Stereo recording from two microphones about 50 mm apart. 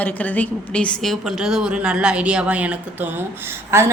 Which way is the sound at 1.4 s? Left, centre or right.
Centre.